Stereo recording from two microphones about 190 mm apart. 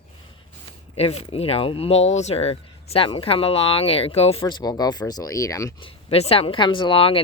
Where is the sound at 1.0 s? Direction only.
30° left (ahead or behind).